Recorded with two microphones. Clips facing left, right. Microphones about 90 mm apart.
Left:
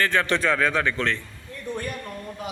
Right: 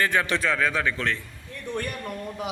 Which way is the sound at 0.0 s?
10° right (ahead or behind).